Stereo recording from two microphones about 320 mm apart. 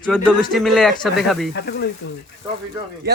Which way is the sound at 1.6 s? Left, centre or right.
Left.